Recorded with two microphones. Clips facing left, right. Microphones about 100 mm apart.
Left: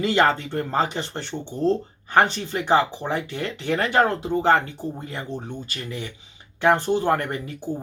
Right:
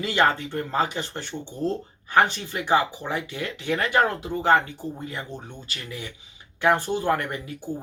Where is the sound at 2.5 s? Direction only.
30° left (ahead or behind).